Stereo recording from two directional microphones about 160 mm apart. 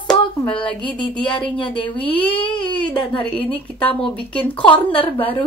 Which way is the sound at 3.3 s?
10° left (ahead or behind).